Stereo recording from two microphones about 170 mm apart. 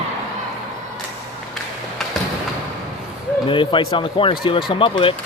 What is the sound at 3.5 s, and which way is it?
Speech, 30° left (ahead or behind).